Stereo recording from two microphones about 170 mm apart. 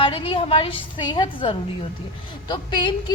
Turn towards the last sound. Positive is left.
turn(degrees=25)  # may be behind; listen again after turning